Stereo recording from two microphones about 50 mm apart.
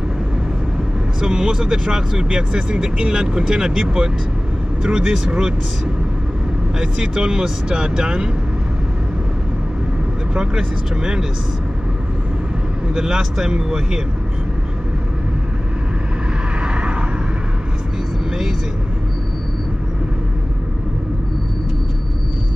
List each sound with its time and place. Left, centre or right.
1.2 s speech: centre
6.8 s speech: centre
10.3 s speech: centre
12.9 s speech: centre
16.6 s vehicle: right